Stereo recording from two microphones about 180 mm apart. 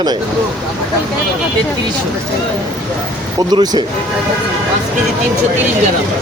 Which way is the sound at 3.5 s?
20° right (ahead or behind).